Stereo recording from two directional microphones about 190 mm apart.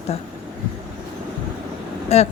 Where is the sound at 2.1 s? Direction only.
35° left (ahead or behind).